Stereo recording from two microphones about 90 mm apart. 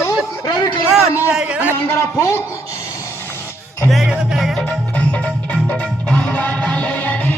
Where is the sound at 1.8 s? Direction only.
30° left (ahead or behind).